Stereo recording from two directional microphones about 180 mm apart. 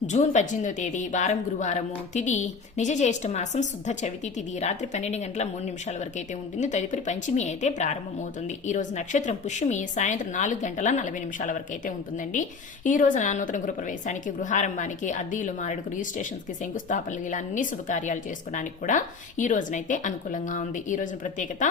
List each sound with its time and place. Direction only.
0.1 s a woman's voice: 40° left (ahead or behind)